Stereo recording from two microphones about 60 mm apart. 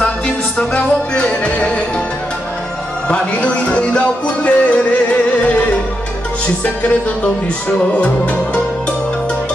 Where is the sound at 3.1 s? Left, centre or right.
Left.